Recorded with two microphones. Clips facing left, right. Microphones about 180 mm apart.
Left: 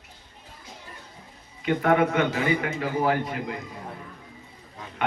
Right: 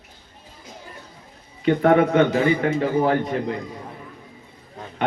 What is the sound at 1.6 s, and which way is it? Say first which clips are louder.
Speech: right 5 dB; 35° right (ahead or behind).